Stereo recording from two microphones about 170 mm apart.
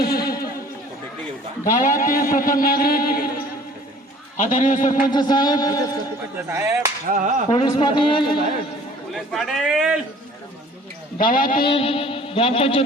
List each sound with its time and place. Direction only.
0.0 s a sound: 65° left (ahead or behind)
1.8 s speech: 55° left (ahead or behind)
4.4 s a man's voice: 50° left (ahead or behind)
5.1 s speech: 25° left (ahead or behind)
6.3 s speech: 15° right (ahead or behind)
7.1 s whip: 50° right (ahead or behind)
7.5 s speech: 30° left (ahead or behind)
9.1 s a man's voice: centre (ahead or behind)
11.2 s speech: 55° left (ahead or behind)
11.6 s speech: 30° left (ahead or behind)